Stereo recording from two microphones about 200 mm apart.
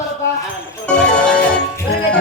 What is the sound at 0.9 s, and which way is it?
Music, 5° left (ahead or behind).